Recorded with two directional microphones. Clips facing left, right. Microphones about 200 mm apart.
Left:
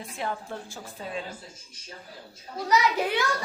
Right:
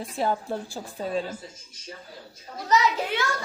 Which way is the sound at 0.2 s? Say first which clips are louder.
Right 7 dB; 35° right (ahead or behind).